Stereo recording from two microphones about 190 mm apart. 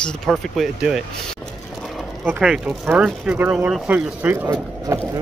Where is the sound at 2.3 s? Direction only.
5° right (ahead or behind).